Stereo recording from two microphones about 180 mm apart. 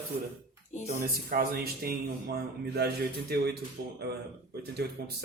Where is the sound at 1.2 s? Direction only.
55° right (ahead or behind).